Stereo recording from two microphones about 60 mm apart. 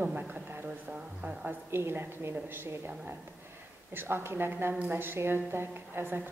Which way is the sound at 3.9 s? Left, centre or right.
Right.